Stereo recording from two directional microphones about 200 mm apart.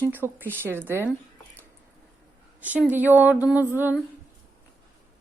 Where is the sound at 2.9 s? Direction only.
10° right (ahead or behind).